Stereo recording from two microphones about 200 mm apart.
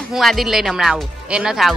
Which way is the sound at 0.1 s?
Centre (ahead or behind).